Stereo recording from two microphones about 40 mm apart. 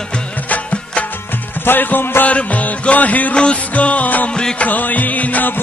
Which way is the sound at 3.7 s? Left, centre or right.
Left.